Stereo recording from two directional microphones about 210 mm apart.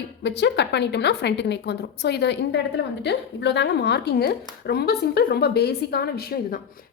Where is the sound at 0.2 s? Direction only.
55° left (ahead or behind).